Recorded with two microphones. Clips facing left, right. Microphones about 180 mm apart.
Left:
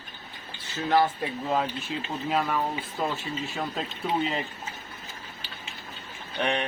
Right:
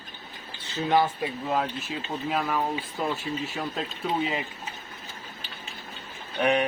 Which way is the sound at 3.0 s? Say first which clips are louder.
Even; 5° right (ahead or behind).